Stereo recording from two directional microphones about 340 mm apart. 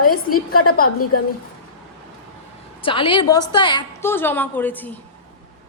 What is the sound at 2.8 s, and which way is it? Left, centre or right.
A woman's voice, centre.